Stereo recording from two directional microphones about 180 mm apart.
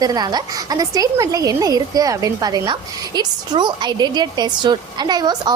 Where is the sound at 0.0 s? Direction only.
20° right (ahead or behind).